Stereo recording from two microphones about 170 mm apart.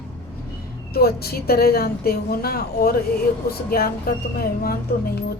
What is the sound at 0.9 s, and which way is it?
A woman's voice, 65° left (ahead or behind).